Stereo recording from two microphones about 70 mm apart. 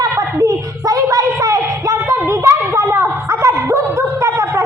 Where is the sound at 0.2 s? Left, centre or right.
Right.